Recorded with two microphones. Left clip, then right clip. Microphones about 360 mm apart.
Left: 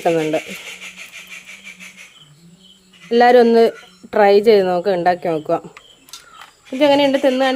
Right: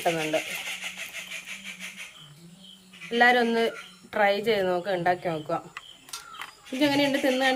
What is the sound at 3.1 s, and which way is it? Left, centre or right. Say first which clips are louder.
Speech: left 10 dB; centre.